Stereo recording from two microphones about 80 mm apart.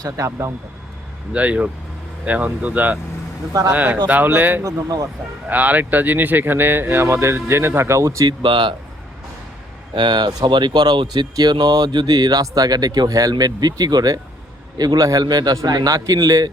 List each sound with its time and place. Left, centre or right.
0.0 s speech: right
1.3 s speech: centre
4.6 s a man's voice: right
5.5 s speech: right
8.3 s speech: right
9.9 s speech: right
13.3 s a man's voice: right